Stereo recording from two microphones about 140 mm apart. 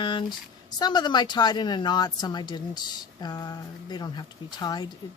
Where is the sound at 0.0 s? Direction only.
35° left (ahead or behind).